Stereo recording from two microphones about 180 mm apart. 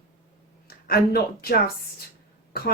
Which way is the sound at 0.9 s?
60° left (ahead or behind).